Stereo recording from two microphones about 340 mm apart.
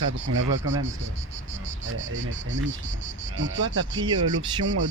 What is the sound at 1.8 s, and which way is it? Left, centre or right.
Speech, right.